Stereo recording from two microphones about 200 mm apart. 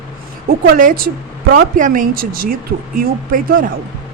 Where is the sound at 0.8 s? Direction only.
45° right (ahead or behind).